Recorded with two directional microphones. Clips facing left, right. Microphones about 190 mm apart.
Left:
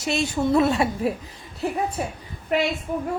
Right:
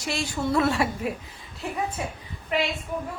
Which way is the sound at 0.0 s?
20° left (ahead or behind).